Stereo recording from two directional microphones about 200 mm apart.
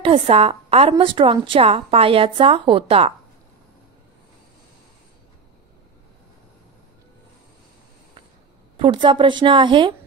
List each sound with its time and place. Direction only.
0.0 s a woman's voice: 25° right (ahead or behind)
8.7 s a woman's voice: 25° right (ahead or behind)